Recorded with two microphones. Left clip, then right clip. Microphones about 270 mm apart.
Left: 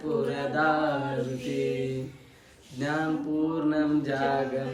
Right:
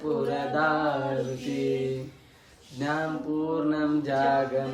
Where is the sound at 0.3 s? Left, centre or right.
Right.